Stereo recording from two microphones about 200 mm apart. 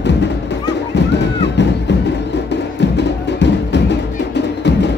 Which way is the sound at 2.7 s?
60° left (ahead or behind).